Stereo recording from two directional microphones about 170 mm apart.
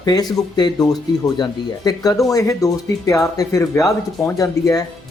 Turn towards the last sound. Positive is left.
turn(degrees=20)  # may be behind; listen again after turning